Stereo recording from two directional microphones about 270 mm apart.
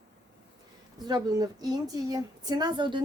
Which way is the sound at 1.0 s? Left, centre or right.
Centre.